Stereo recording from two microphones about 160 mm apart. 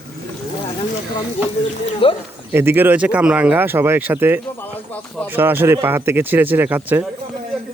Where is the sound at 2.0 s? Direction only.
35° left (ahead or behind).